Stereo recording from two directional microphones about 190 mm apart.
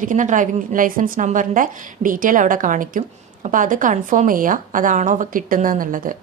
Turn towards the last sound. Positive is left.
turn(degrees=-45)  # may be behind; listen again after turning